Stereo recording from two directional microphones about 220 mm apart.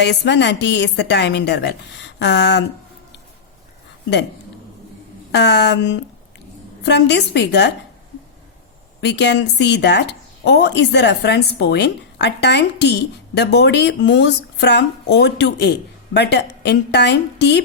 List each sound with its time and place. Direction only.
0.0 s a woman's voice: 50° left (ahead or behind)
5.3 s a woman's voice: 50° left (ahead or behind)
9.0 s a woman's voice: 50° left (ahead or behind)